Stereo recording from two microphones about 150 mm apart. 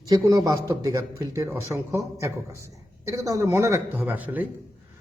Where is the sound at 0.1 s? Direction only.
25° right (ahead or behind).